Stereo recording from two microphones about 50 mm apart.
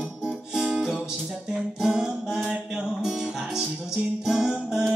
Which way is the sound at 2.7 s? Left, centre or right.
Centre.